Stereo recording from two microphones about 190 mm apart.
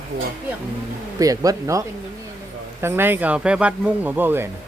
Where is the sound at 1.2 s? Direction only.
20° right (ahead or behind).